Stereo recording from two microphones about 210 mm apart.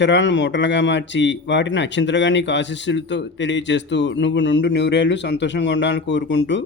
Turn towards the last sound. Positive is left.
turn(degrees=60)  # may be behind; listen again after turning